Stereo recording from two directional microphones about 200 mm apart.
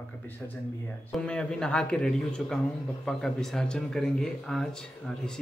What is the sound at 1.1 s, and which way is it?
Speech, 5° left (ahead or behind).